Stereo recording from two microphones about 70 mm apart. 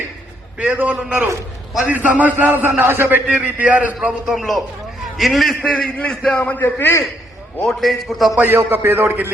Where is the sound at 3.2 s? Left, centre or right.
Centre.